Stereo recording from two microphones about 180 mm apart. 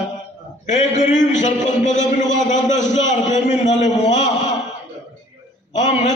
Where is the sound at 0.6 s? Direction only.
40° left (ahead or behind).